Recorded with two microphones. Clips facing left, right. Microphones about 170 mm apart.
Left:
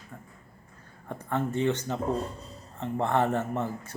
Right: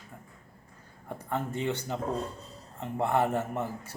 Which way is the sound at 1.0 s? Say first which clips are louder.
Left 3 dB; 10° right (ahead or behind).